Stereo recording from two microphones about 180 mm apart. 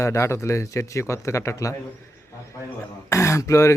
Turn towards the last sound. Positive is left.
turn(degrees=15)  # may be behind; listen again after turning